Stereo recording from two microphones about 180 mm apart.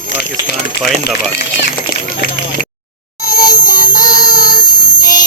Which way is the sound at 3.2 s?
20° left (ahead or behind).